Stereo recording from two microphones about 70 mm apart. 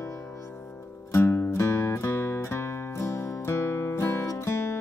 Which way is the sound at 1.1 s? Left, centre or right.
Left.